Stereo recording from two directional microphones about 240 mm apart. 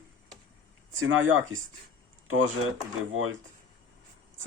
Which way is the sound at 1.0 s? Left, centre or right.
Right.